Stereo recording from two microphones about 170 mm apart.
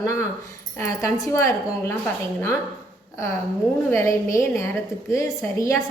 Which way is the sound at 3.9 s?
15° left (ahead or behind).